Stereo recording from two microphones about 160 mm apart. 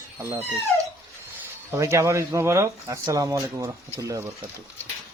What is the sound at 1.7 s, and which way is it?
Speech, 15° right (ahead or behind).